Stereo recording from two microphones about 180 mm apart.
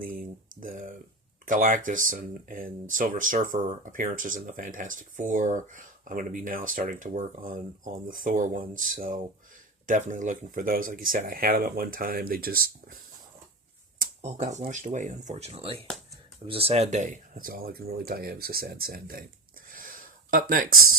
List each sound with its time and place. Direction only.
0.0 s speech: 50° right (ahead or behind)
14.0 s speech: 40° right (ahead or behind)
19.7 s a sound: 50° right (ahead or behind)